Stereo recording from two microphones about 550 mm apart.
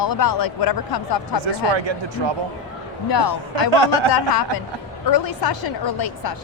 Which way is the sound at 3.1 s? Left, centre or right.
Left.